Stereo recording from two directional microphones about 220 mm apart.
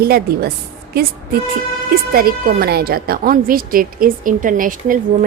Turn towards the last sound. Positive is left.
turn(degrees=-35)  # may be behind; listen again after turning